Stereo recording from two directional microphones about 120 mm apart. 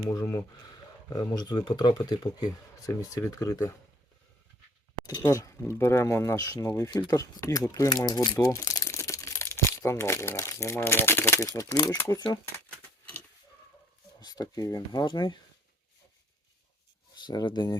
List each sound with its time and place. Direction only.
0.0 s speech: 30° left (ahead or behind)
5.0 s speech: 30° left (ahead or behind)
11.4 s speech: 30° left (ahead or behind)
14.2 s speech: 35° left (ahead or behind)
17.2 s speech: 40° left (ahead or behind)